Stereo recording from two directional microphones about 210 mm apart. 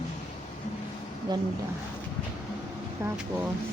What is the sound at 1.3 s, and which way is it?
Speech, 20° right (ahead or behind).